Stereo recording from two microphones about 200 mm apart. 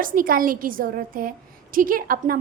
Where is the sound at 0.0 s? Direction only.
45° right (ahead or behind).